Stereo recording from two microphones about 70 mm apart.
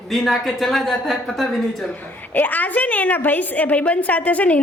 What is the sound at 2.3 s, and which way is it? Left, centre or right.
A woman's voice, left.